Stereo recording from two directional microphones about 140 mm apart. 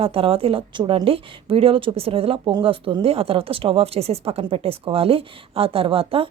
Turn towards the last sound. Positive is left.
turn(degrees=-40)  # may be behind; listen again after turning